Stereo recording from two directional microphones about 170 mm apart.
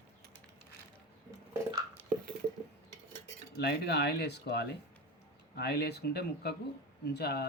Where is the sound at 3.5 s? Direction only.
75° left (ahead or behind).